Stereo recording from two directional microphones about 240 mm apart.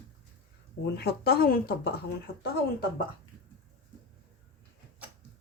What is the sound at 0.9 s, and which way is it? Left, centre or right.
Speech, left.